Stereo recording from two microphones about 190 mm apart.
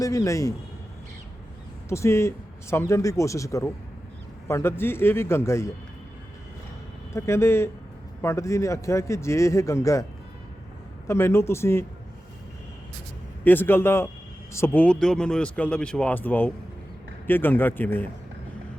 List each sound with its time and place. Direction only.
0.0 s speech: 15° left (ahead or behind)
1.9 s speech: 15° left (ahead or behind)
7.1 s speech: 15° left (ahead or behind)
11.1 s speech: 15° left (ahead or behind)
13.4 s speech: 10° left (ahead or behind)